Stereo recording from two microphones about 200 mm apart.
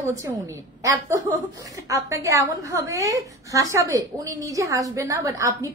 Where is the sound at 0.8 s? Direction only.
15° right (ahead or behind).